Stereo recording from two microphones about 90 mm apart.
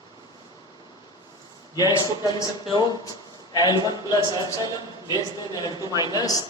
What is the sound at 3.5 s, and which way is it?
A man's voice, 50° left (ahead or behind).